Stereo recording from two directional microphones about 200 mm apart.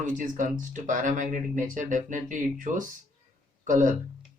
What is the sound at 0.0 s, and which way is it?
Speech, 40° right (ahead or behind).